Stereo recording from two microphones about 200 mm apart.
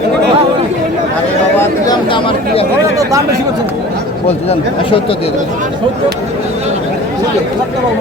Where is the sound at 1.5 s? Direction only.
15° left (ahead or behind).